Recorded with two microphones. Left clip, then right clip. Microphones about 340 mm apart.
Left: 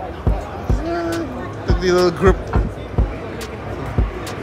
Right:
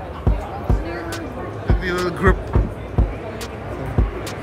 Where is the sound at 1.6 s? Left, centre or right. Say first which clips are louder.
Left 7 dB; centre.